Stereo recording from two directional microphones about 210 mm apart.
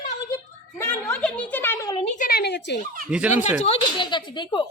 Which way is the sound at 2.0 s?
35° left (ahead or behind).